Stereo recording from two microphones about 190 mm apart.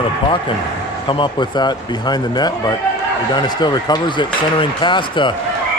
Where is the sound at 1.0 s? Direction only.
25° left (ahead or behind).